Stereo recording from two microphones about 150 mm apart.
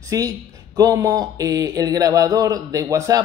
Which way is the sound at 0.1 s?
25° right (ahead or behind).